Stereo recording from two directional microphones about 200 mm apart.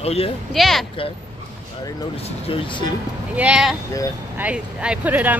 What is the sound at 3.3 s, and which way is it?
Speech, 5° right (ahead or behind).